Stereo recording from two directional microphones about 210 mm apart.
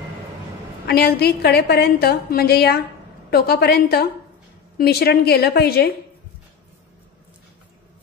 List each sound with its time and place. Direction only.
0.8 s a woman's voice: 50° left (ahead or behind)